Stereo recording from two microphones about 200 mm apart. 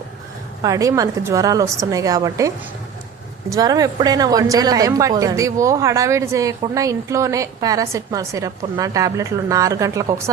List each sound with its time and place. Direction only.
0.6 s a woman's voice: 15° right (ahead or behind)
3.5 s a woman's voice: 20° right (ahead or behind)